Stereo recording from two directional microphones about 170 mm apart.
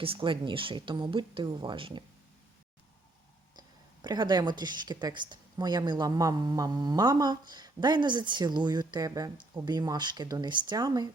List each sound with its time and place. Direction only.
0.0 s speech: 30° right (ahead or behind)
4.0 s speech: 25° right (ahead or behind)